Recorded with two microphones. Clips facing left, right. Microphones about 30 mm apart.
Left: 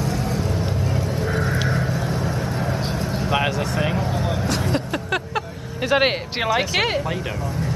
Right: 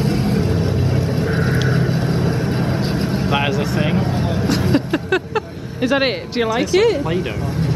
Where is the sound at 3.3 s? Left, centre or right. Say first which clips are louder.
Right 1 dB; centre.